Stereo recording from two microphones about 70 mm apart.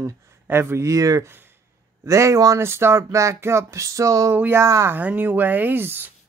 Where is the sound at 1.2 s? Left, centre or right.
Right.